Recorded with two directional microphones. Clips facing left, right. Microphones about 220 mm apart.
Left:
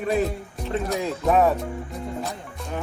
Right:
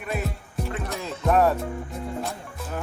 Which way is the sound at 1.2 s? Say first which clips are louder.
Even; centre (ahead or behind).